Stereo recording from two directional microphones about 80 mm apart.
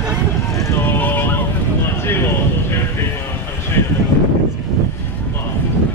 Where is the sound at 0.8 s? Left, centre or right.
Left.